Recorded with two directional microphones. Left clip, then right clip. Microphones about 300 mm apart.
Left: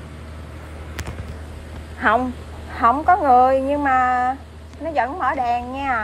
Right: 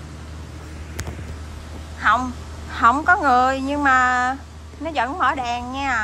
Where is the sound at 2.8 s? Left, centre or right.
Centre.